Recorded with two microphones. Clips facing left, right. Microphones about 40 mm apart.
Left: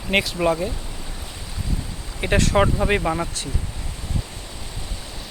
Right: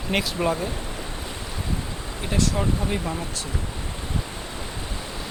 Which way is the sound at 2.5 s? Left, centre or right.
Left.